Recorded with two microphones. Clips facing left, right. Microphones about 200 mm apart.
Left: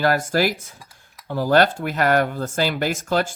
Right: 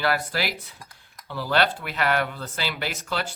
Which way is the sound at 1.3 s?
45° left (ahead or behind).